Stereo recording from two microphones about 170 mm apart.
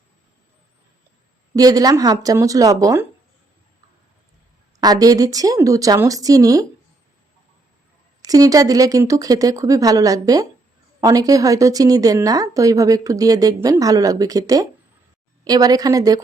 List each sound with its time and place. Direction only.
1.5 s a woman's voice: 20° right (ahead or behind)
4.8 s a woman's voice: 20° right (ahead or behind)
8.2 s a woman's voice: 20° right (ahead or behind)